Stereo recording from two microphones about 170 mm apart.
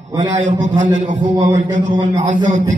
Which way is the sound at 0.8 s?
45° right (ahead or behind).